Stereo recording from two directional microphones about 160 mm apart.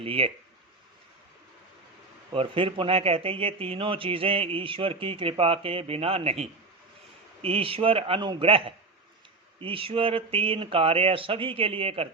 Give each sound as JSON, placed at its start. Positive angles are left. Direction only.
{"t": 0.0, "sound": "speech", "side_deg": -35}
{"t": 2.3, "sound": "speech", "side_deg": -35}